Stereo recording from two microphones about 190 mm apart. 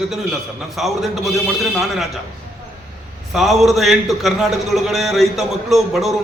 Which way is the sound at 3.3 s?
Centre (ahead or behind).